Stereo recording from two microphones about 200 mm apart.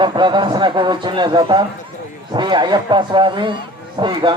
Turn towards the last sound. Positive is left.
turn(degrees=-25)  # may be behind; listen again after turning